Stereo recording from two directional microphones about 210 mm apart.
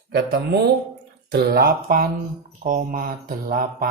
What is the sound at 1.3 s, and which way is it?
Speech, 50° right (ahead or behind).